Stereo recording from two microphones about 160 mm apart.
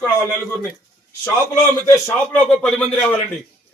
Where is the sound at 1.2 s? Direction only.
10° left (ahead or behind).